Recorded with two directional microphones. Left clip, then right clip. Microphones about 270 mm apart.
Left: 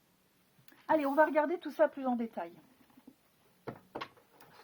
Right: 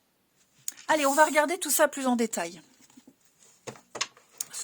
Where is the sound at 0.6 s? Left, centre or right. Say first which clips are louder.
Right 6 dB; right.